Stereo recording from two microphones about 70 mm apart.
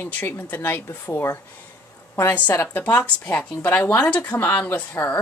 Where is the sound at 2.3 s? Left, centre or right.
Left.